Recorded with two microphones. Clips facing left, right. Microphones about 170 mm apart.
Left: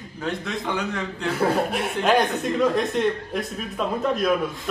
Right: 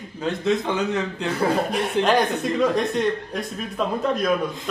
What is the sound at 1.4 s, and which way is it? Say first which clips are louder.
Speech: even; centre (ahead or behind).